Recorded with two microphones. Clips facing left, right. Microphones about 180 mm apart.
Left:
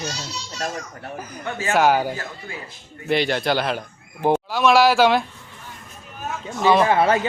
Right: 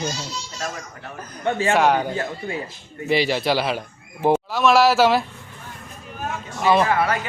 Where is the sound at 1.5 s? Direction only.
30° right (ahead or behind).